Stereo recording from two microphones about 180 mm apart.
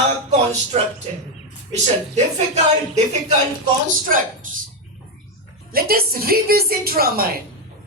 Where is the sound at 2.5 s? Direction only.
40° right (ahead or behind).